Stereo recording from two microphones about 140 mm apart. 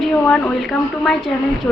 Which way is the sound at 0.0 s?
5° left (ahead or behind).